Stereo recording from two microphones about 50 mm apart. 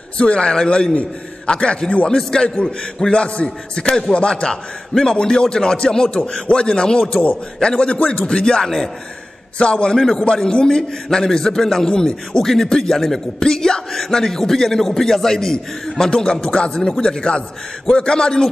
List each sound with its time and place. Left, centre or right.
0.2 s a man's voice: left
9.6 s a man's voice: left